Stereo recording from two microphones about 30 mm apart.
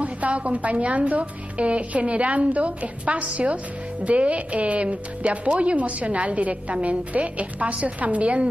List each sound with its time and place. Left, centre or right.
0.0 s speech: right